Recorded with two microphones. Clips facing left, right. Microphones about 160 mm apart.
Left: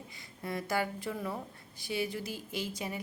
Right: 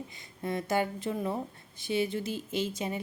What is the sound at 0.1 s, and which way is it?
Speech, 20° right (ahead or behind).